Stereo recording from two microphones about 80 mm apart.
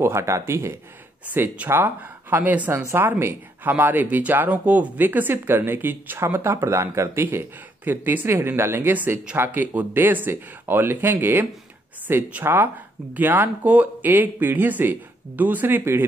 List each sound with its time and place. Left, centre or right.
0.0 s speech: right
7.2 s speech: right